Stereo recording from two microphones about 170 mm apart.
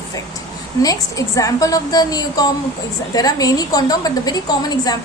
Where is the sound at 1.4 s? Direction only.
20° left (ahead or behind).